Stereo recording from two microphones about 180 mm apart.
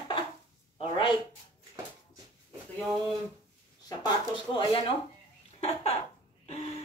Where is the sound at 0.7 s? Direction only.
30° left (ahead or behind).